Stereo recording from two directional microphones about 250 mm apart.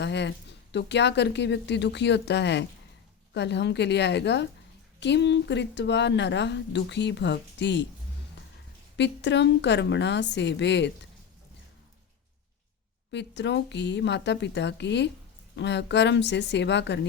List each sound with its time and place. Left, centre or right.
0.0 s speech: left
9.0 s speech: left
13.1 s speech: left